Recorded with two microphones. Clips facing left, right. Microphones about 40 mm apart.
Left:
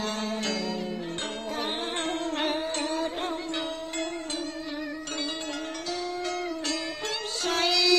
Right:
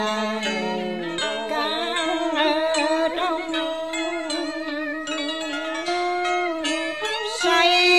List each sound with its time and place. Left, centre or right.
1.6 s music: right
7.4 s music: right